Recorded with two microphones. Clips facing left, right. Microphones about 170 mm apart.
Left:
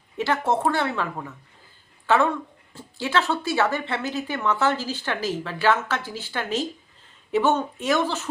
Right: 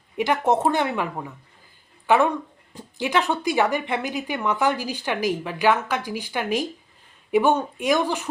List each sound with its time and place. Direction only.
0.2 s speech: 15° right (ahead or behind)